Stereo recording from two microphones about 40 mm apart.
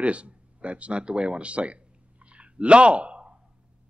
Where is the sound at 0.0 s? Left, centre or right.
Right.